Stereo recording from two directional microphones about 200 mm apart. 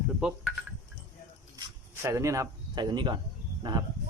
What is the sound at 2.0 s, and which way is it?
Speech, 15° right (ahead or behind).